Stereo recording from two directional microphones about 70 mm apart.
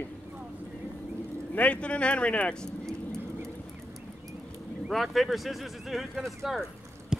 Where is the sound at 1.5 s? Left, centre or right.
Centre.